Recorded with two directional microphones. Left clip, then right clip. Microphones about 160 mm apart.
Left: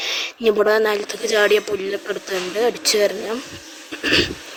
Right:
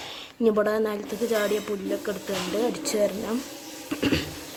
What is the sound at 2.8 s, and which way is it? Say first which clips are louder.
Speech: left 8 dB; 25° left (ahead or behind).